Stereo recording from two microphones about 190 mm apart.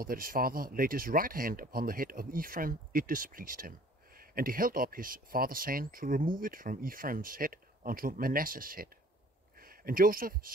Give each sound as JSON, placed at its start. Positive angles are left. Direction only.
{"t": 0.0, "sound": "speech", "side_deg": -50}